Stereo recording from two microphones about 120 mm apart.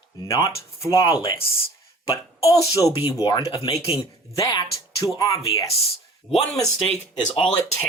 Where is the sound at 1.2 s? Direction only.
25° left (ahead or behind).